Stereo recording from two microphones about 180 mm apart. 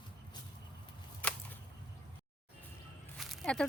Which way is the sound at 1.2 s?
10° left (ahead or behind).